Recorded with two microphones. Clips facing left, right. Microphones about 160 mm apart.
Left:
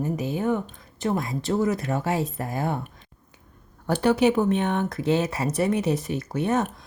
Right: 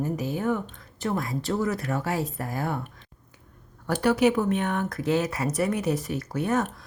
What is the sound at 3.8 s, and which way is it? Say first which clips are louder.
A woman's voice: left 1 dB; 25° left (ahead or behind).